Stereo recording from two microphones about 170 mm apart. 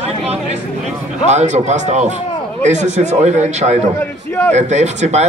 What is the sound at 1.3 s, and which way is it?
Speech, 40° right (ahead or behind).